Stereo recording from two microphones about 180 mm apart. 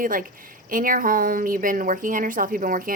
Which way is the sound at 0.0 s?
50° right (ahead or behind).